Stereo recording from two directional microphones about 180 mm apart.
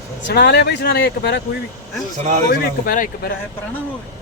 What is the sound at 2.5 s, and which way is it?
Speech, 50° left (ahead or behind).